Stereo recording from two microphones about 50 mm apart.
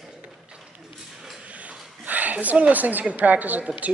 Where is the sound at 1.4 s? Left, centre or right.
Right.